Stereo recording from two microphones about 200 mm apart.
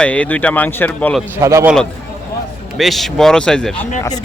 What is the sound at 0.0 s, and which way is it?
Speech, 5° left (ahead or behind).